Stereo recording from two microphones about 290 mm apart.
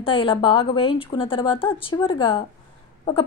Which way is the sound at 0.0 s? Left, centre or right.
Centre.